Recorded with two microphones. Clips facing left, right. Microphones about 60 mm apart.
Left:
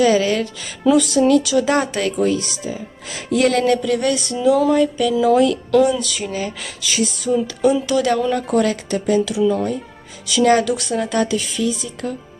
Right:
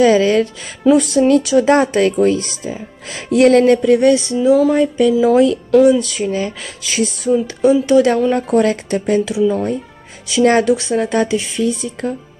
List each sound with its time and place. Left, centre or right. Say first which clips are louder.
0.0 s speech: right 4 dB; right
4.7 s speech: right 3 dB; right
5.1 s speech: right 1 dB; centre
5.4 s speech: right 4 dB; right
5.9 s speech: right 6 dB; right
9.4 s speech: right 2 dB; centre
10.2 s speech: right 3 dB; right
11.7 s speech: right 4 dB; right